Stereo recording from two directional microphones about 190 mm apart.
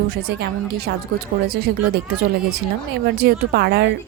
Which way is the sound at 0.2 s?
60° right (ahead or behind).